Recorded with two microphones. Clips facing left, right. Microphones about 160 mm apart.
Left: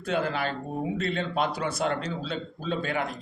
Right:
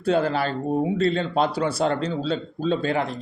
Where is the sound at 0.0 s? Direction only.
35° right (ahead or behind).